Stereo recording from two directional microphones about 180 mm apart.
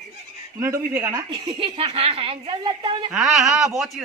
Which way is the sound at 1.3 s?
25° right (ahead or behind).